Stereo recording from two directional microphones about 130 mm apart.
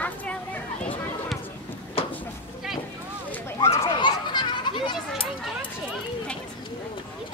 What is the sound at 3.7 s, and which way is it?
Children playing, 45° left (ahead or behind).